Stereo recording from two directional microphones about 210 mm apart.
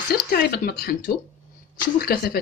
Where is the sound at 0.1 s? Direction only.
45° left (ahead or behind).